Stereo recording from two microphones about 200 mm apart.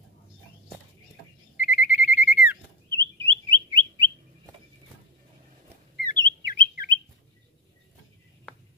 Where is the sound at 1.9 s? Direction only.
40° left (ahead or behind).